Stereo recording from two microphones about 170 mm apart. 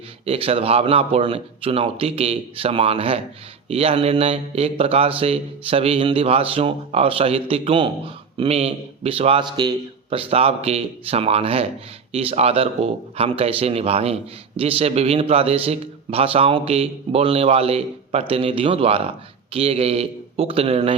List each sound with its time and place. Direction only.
0.3 s a man's voice: 35° right (ahead or behind)